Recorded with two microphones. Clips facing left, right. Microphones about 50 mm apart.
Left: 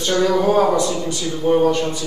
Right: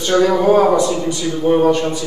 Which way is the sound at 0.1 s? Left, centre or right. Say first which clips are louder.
Right 4 dB; centre.